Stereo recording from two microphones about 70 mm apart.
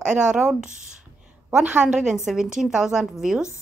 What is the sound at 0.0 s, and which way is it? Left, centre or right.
A woman's voice, centre.